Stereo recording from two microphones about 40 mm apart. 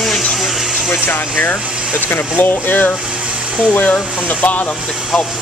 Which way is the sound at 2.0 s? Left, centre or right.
Left.